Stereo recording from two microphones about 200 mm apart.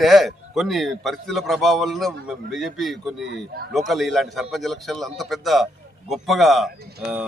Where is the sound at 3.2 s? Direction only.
55° right (ahead or behind).